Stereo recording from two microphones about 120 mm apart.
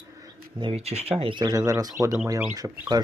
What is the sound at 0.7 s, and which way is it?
Speech, 60° right (ahead or behind).